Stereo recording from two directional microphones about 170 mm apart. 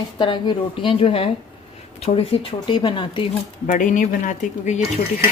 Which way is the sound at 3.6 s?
50° left (ahead or behind).